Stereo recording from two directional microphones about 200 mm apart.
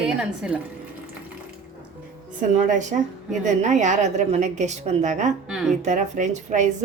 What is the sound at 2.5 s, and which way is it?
A woman's voice, 35° right (ahead or behind).